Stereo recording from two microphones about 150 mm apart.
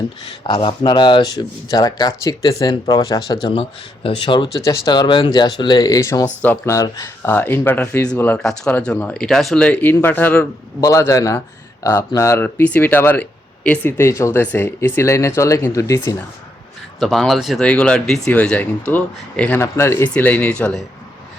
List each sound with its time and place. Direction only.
0.4 s speech: 30° left (ahead or behind)
3.5 s speech: 40° left (ahead or behind); by 10.4 s 10° left (ahead or behind)
10.8 s speech: 20° left (ahead or behind)
17.0 s speech: centre (ahead or behind)